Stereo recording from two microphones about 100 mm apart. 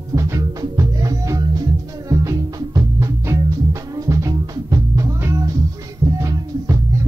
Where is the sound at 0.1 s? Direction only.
35° right (ahead or behind).